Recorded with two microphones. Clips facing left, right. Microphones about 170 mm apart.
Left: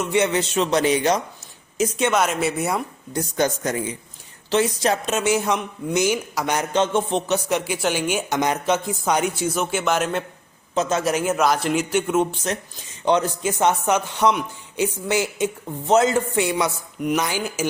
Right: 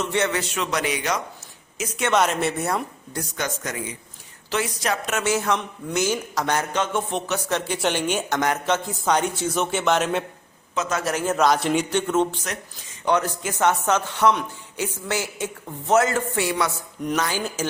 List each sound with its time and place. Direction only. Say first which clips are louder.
0.0 s a man's voice: left 3 dB; 15° left (ahead or behind); by 1.9 s 30° left (ahead or behind)
2.1 s speech: even; 5° left (ahead or behind)
3.3 s speech: left 8 dB; 35° left (ahead or behind); by 6.7 s 15° left (ahead or behind)
6.7 s speech: left 4 dB; 25° left (ahead or behind); by 10.2 s centre (ahead or behind)
10.8 s a man's voice: left 4 dB; 25° left (ahead or behind)
11.0 s speech: left 1 dB; 15° left (ahead or behind)